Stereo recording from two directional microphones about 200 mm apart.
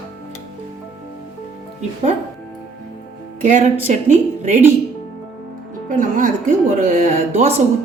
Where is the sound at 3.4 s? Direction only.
40° right (ahead or behind).